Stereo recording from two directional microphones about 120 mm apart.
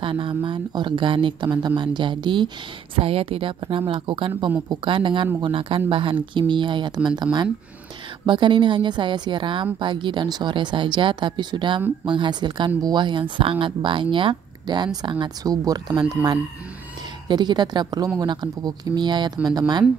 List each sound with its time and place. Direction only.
0.0 s speech: 45° right (ahead or behind)
3.0 s speech: 55° right (ahead or behind)
8.3 s speech: 40° right (ahead or behind)